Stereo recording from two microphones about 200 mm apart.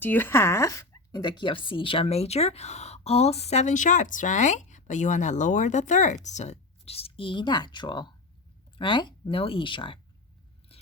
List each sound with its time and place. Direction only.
0.0 s speech: 10° left (ahead or behind); by 10.0 s 25° left (ahead or behind)